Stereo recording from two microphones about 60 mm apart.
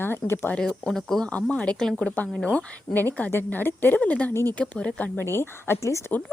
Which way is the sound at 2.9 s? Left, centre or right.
Left.